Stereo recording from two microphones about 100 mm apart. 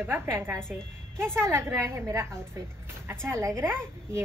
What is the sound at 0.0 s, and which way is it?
Speech, 20° right (ahead or behind).